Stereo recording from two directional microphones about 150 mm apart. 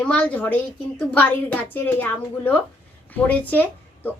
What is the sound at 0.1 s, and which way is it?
A woman's voice, 10° left (ahead or behind).